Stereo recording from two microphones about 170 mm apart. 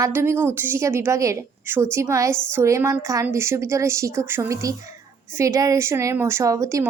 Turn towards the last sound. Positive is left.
turn(degrees=-20)  # may be behind; listen again after turning